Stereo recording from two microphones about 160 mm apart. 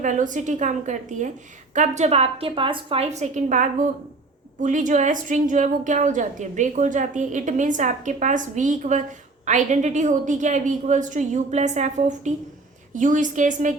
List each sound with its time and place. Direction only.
0.0 s a woman's voice: 50° right (ahead or behind)